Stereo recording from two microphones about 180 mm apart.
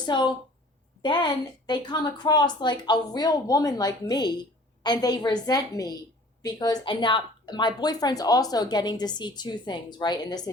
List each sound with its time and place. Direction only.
0.0 s a woman's voice: 25° left (ahead or behind)